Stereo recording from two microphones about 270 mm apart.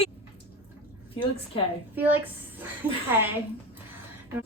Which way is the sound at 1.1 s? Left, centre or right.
Left.